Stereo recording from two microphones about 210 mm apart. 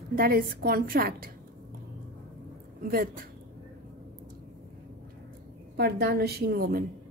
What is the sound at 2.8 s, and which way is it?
Speech, 40° right (ahead or behind).